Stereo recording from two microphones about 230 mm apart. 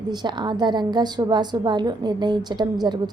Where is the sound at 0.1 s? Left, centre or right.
Centre.